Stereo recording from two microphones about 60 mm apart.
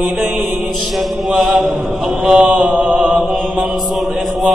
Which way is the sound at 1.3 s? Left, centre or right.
Centre.